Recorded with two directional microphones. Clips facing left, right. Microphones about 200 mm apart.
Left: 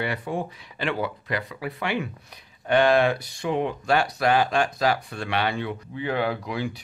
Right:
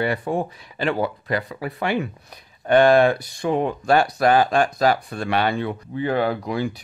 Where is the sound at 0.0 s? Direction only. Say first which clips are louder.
Right 5 dB; 45° right (ahead or behind).